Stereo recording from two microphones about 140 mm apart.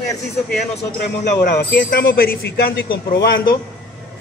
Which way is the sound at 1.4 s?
80° left.